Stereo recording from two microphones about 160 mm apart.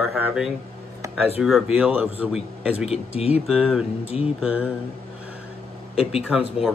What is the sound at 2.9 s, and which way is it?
Speech, 40° left (ahead or behind).